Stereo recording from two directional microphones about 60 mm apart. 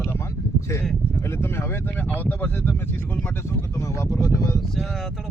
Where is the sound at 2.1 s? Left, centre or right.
Left.